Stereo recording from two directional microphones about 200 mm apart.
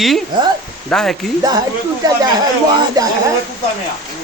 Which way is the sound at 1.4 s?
20° right (ahead or behind).